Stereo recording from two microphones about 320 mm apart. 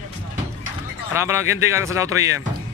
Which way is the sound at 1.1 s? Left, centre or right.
Centre.